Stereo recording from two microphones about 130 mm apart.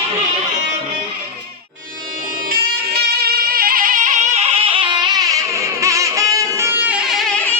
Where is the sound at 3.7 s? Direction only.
90° right.